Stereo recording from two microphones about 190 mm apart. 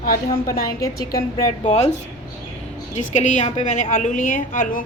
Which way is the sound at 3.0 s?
40° left (ahead or behind).